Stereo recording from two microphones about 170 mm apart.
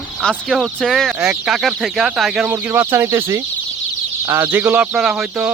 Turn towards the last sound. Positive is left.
turn(degrees=-5)  # may be behind; listen again after turning